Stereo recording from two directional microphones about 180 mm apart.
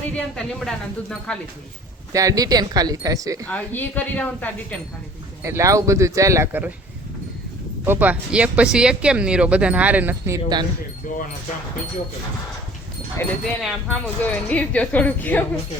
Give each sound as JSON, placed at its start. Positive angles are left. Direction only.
{"t": 0.1, "sound": "speech", "side_deg": 5}
{"t": 2.1, "sound": "speech", "side_deg": -20}
{"t": 3.4, "sound": "speech", "side_deg": 10}
{"t": 5.4, "sound": "speech", "side_deg": -15}
{"t": 7.9, "sound": "speech", "side_deg": -10}
{"t": 11.1, "sound": "speech", "side_deg": 50}
{"t": 13.4, "sound": "speech", "side_deg": 5}